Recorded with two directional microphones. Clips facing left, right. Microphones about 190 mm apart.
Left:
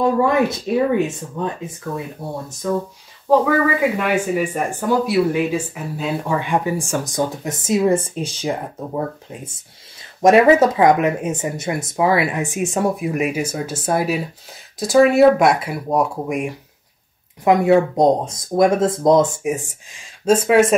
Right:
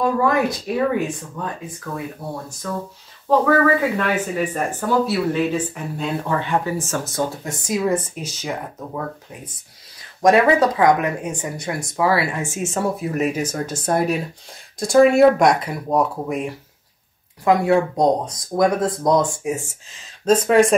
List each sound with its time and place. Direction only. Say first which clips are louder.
0.0 s speech: left 2 dB; 25° left (ahead or behind)
3.3 s speech: even; 10° left (ahead or behind)